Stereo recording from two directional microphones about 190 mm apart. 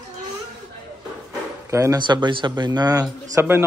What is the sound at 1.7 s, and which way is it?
Speech, 15° right (ahead or behind).